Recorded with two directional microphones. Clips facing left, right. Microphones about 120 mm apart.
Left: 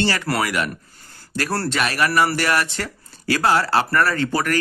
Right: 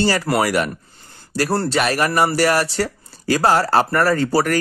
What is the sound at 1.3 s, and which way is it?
Speech, 35° right (ahead or behind).